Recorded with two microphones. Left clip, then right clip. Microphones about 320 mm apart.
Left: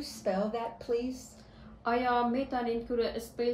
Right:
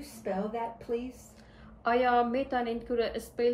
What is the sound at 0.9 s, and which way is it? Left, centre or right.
Speech, left.